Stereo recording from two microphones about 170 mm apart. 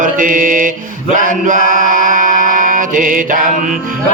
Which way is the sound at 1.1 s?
50° right (ahead or behind).